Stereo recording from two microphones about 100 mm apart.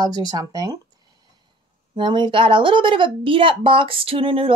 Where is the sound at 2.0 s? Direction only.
50° right (ahead or behind).